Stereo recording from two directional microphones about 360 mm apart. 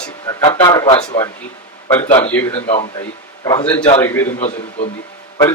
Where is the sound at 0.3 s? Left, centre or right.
Centre.